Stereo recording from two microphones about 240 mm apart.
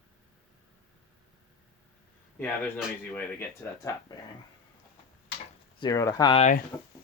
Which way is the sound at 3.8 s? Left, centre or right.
Centre.